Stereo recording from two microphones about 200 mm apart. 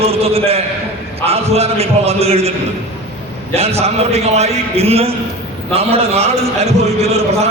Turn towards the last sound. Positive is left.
turn(degrees=-35)  # may be behind; listen again after turning